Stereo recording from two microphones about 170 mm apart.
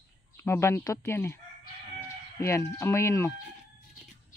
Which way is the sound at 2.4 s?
15° left (ahead or behind).